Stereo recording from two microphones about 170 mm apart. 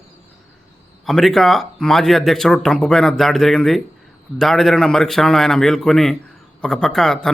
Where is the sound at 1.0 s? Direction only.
Centre (ahead or behind).